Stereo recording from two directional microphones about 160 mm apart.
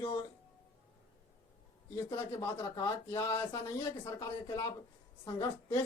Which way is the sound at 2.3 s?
20° left (ahead or behind).